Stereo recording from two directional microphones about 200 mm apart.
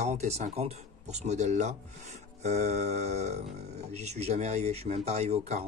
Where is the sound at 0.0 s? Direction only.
35° right (ahead or behind).